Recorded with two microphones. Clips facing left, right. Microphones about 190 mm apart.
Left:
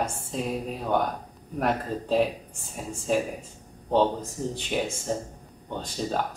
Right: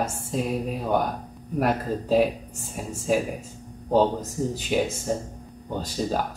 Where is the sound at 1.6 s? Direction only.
5° right (ahead or behind).